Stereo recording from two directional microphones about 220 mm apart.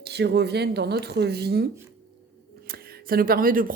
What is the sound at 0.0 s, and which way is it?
Speech, 50° right (ahead or behind).